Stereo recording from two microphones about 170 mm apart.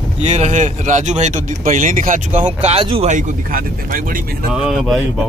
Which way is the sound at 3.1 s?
50° right (ahead or behind).